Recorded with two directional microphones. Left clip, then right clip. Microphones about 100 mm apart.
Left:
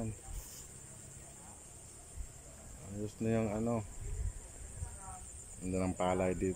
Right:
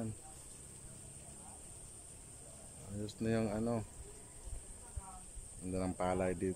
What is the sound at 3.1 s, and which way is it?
Speech, centre (ahead or behind).